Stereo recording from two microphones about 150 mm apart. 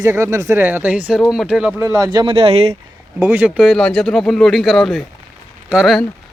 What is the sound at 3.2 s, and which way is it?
Speech, 10° right (ahead or behind).